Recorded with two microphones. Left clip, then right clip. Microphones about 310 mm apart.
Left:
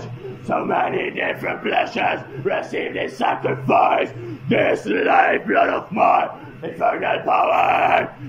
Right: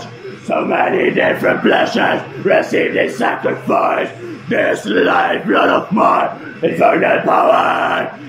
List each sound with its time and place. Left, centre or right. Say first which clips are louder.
0.5 s battle cry: right 5 dB; centre